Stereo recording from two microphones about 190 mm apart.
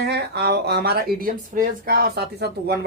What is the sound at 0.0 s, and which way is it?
Speech, 60° right (ahead or behind).